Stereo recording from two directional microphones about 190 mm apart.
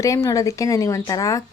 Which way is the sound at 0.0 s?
15° left (ahead or behind).